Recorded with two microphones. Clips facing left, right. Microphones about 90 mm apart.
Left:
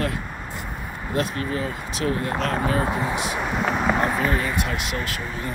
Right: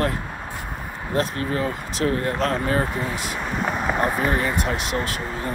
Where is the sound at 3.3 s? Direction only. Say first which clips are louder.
Left 2 dB; centre (ahead or behind).